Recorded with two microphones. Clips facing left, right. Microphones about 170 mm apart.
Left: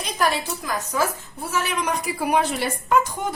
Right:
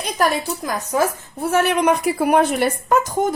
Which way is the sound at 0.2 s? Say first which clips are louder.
Right 3 dB; 50° right (ahead or behind).